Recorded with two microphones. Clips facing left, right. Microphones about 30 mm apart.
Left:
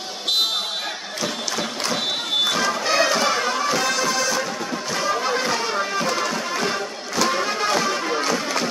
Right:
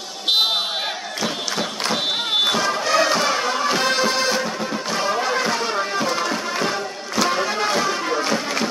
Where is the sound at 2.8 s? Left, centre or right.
Centre.